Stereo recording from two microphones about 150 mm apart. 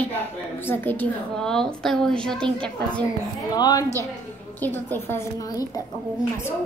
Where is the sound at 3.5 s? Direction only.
25° left (ahead or behind).